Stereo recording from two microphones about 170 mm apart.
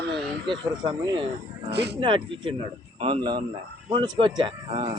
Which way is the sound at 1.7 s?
80° right.